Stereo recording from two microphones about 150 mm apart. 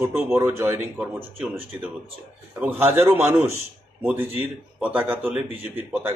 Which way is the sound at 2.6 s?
15° right (ahead or behind).